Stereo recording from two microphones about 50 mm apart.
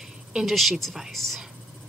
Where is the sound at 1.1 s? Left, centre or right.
Centre.